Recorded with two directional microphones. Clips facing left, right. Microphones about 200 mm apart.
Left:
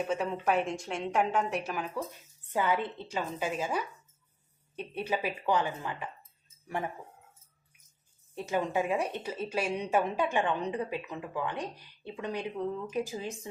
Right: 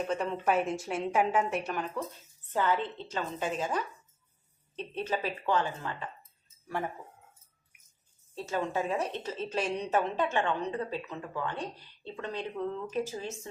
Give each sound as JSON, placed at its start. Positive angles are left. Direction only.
{"t": 0.0, "sound": "a woman's voice", "side_deg": 5}
{"t": 8.4, "sound": "speech", "side_deg": 15}